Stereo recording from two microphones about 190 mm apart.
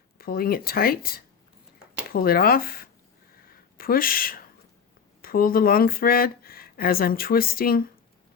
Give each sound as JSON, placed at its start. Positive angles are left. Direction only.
{"t": 0.2, "sound": "speech", "side_deg": 50}
{"t": 3.5, "sound": "a sound", "side_deg": 50}
{"t": 5.2, "sound": "speech", "side_deg": 50}